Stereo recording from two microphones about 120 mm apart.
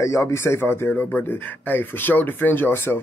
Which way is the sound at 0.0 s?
25° left (ahead or behind).